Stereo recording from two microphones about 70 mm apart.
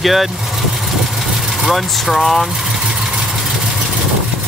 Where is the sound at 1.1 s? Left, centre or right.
Centre.